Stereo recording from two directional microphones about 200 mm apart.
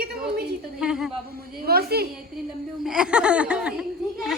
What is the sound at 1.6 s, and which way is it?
Speech, 50° right (ahead or behind).